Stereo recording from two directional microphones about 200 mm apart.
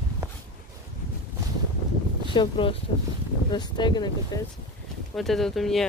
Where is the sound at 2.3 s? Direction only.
25° left (ahead or behind).